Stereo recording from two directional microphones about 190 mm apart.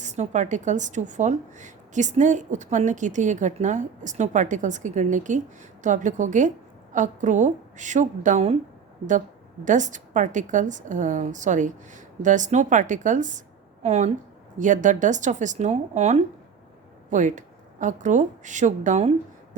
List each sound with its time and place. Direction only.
0.0 s a woman's voice: 40° right (ahead or behind)
9.6 s a woman's voice: 40° right (ahead or behind)